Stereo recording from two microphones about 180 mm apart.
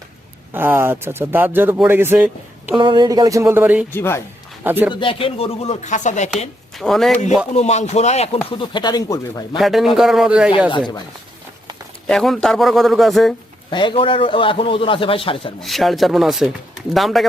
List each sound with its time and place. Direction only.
0.5 s speech: 10° right (ahead or behind)
2.7 s speech: 25° right (ahead or behind)
3.9 s speech: 15° left (ahead or behind)
4.6 s speech: 10° right (ahead or behind)
4.9 s speech: 30° left (ahead or behind)
6.7 s a man's voice: centre (ahead or behind)
7.5 s a man's voice: 40° left (ahead or behind); by 9.6 s 20° left (ahead or behind)
9.6 s a man's voice: centre (ahead or behind)
10.7 s a man's voice: 25° left (ahead or behind)
12.0 s a man's voice: centre (ahead or behind)
13.7 s a man's voice: 25° left (ahead or behind)
15.6 s a man's voice: centre (ahead or behind)